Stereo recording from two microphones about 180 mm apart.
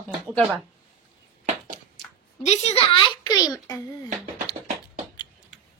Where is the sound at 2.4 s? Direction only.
35° left (ahead or behind).